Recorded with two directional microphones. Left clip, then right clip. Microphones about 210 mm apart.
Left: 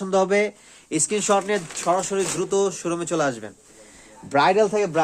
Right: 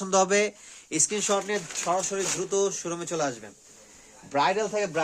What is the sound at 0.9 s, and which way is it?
Speech, 20° left (ahead or behind).